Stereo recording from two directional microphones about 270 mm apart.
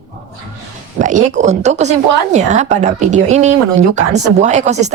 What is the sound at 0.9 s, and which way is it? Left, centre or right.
Speech, right.